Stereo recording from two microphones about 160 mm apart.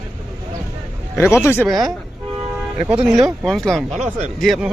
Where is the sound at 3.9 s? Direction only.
45° right (ahead or behind).